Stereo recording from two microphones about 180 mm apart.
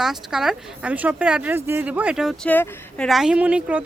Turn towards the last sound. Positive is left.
turn(degrees=-5)  # may be behind; listen again after turning